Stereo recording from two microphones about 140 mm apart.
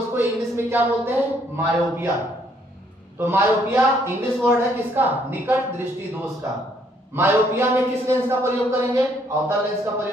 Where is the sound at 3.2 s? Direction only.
15° right (ahead or behind).